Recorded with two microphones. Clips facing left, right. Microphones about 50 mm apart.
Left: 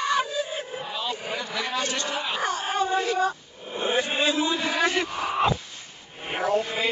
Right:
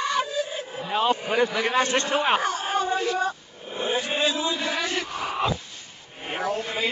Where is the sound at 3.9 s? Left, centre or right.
Left.